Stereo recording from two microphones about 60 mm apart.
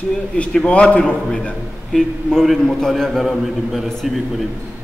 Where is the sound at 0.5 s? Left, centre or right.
Centre.